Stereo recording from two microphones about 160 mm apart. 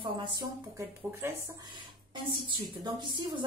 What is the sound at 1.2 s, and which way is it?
Speech, 15° right (ahead or behind).